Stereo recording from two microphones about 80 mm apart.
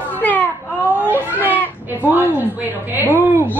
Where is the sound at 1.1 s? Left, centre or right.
Right.